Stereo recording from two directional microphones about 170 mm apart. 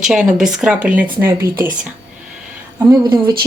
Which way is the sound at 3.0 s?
25° right (ahead or behind).